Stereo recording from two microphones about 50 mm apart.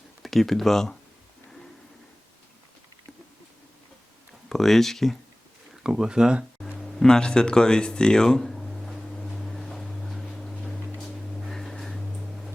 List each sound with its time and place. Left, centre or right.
0.2 s speech: centre
4.4 s speech: centre
5.8 s speech: centre
6.7 s a sound: centre